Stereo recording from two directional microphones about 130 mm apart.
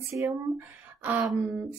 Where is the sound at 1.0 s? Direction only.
10° right (ahead or behind).